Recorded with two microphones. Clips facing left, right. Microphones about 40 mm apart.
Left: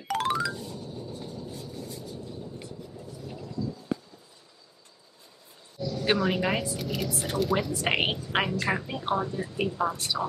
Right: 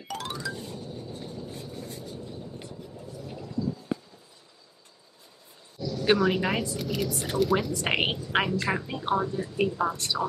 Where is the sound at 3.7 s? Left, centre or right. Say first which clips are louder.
Even; centre.